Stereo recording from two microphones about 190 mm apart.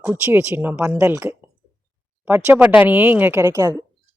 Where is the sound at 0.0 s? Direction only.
10° right (ahead or behind).